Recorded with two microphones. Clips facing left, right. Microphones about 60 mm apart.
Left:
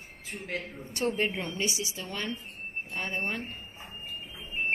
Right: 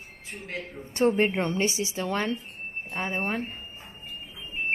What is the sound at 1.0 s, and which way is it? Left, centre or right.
A woman's voice, right.